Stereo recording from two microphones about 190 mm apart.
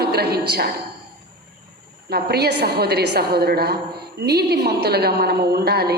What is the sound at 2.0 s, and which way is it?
A woman's voice, 55° right (ahead or behind).